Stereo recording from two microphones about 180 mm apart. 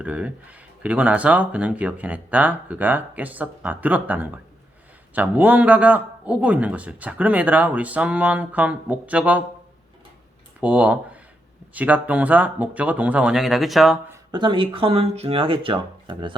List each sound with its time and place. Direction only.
0.0 s a man's voice: 10° right (ahead or behind)
10.6 s a man's voice: 10° right (ahead or behind)
14.1 s speech: 25° right (ahead or behind)